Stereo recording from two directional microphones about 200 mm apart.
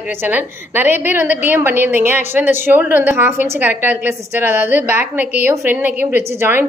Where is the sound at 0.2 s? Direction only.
10° right (ahead or behind).